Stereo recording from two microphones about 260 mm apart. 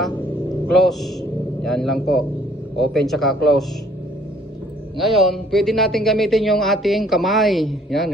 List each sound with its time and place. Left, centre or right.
0.7 s a man's voice: centre
4.9 s a man's voice: centre